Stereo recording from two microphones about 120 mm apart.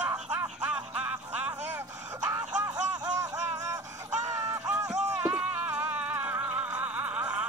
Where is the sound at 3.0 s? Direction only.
30° right (ahead or behind).